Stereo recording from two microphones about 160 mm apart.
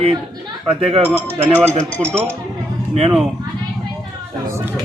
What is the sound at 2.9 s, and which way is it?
Speech, 40° right (ahead or behind).